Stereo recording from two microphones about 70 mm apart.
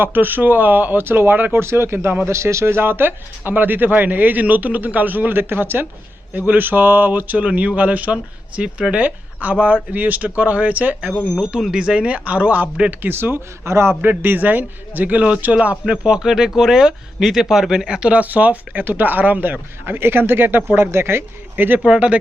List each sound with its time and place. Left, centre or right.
0.0 s speech: right
11.1 s speech: centre
11.7 s speech: centre
13.0 s speech: right
14.0 s speech: right
21.8 s speech: centre